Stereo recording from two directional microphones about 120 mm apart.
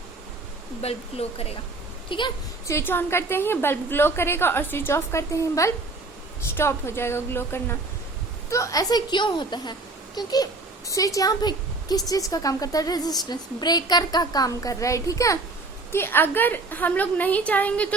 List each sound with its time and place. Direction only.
0.8 s speech: 55° left (ahead or behind)
2.0 s a woman's voice: 40° left (ahead or behind)
2.6 s a woman's voice: 20° left (ahead or behind)